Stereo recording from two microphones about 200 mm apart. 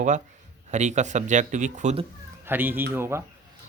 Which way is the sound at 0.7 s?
35° right (ahead or behind).